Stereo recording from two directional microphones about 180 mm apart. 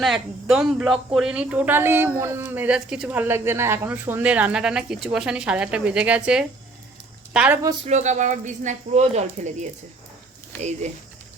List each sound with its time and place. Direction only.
0.0 s speech: centre (ahead or behind)
7.9 s speech: 40° right (ahead or behind)